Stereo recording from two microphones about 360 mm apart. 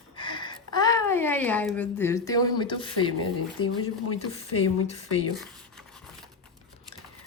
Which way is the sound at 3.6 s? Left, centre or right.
Left.